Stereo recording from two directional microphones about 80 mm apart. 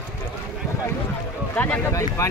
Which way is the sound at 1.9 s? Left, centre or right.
Left.